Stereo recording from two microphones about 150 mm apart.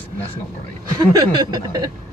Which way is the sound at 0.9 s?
25° right (ahead or behind).